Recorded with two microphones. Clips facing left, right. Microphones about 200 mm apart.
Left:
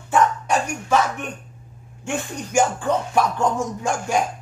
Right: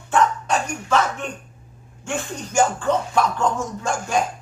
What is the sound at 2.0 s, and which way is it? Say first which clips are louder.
Speech: left 1 dB; 15° left (ahead or behind).